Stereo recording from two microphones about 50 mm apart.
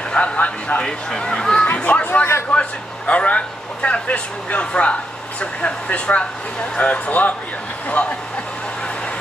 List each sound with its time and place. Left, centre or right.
0.1 s speech: left
1.8 s a sound: left
2.5 s speech: left